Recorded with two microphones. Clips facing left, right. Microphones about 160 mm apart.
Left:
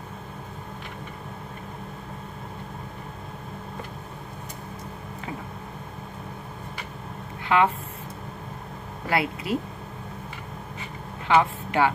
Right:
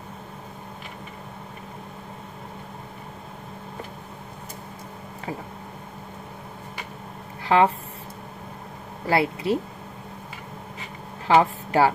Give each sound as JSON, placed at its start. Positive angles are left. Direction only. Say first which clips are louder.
{"t": 7.4, "sound": "speech", "louder": "right 3 dB", "side_deg": -35}
{"t": 9.0, "sound": "speech", "louder": "right 4 dB", "side_deg": -30}
{"t": 11.2, "sound": "speech", "louder": "right 2 dB", "side_deg": -35}